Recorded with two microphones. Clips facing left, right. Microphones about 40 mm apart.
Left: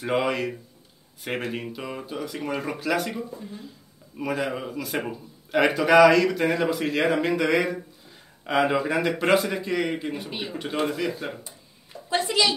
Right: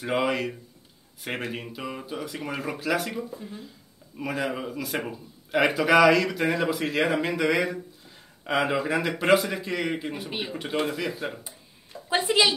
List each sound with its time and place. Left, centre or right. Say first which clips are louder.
0.0 s a man's voice: left 1 dB; centre
12.1 s a woman's voice: right 1 dB; centre